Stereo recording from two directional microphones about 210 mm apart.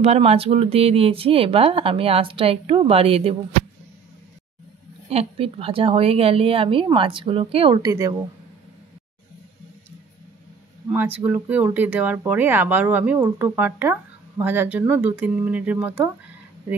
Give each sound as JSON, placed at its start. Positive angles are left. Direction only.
{"t": 0.0, "sound": "speech", "side_deg": -30}
{"t": 5.1, "sound": "speech", "side_deg": -25}
{"t": 10.9, "sound": "speech", "side_deg": -10}